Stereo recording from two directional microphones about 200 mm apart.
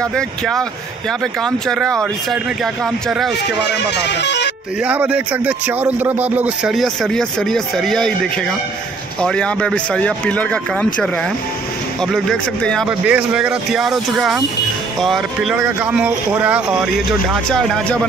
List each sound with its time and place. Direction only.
0.0 s speech: 5° left (ahead or behind)
3.7 s speech: 55° left (ahead or behind)
4.8 s speech: 10° right (ahead or behind)